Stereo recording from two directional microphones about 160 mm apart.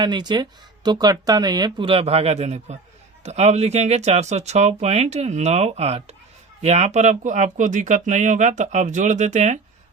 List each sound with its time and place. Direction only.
0.0 s speech: 25° right (ahead or behind); by 9.6 s 45° right (ahead or behind)